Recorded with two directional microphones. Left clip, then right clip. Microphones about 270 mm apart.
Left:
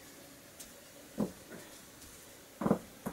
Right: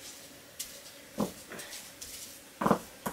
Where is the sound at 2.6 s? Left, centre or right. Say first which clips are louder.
Right 5 dB; centre.